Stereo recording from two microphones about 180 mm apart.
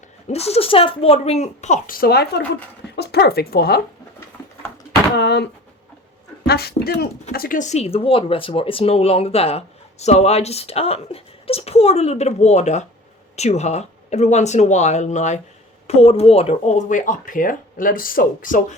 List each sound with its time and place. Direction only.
0.3 s speech: 35° left (ahead or behind); by 3.8 s 60° left (ahead or behind)
5.1 s speech: 70° left (ahead or behind)
6.5 s speech: 60° left (ahead or behind)